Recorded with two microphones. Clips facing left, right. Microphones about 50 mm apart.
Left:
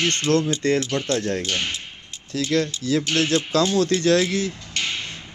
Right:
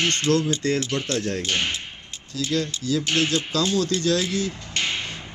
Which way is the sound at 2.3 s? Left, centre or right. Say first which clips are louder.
Left 3 dB; left.